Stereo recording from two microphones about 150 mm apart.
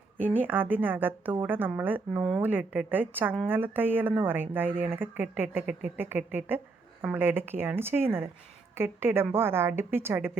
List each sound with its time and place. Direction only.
0.2 s speech: 10° right (ahead or behind)